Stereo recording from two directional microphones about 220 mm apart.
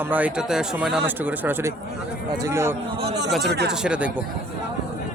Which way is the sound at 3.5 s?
50° right (ahead or behind).